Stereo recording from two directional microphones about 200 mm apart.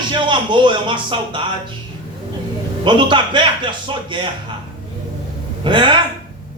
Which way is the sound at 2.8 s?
25° right (ahead or behind).